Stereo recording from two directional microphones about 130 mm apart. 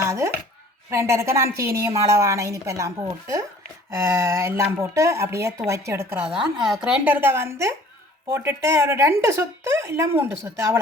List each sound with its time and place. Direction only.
0.0 s chopping: 25° right (ahead or behind)
0.9 s a woman's voice: 20° right (ahead or behind)
6.6 s a woman's voice: 5° right (ahead or behind); by 10.8 s 20° right (ahead or behind)